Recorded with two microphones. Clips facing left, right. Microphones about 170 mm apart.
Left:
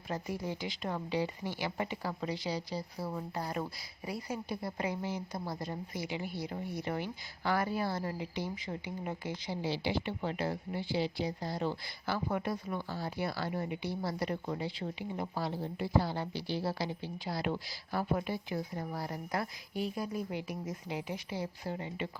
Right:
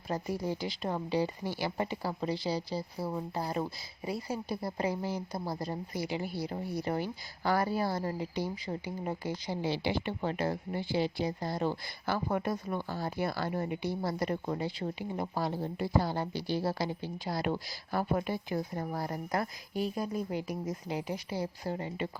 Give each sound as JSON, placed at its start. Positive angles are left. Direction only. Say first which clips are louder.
{"t": 0.1, "sound": "speech", "louder": "right 4 dB", "side_deg": -35}
{"t": 9.6, "sound": "speech", "louder": "right 1 dB", "side_deg": -55}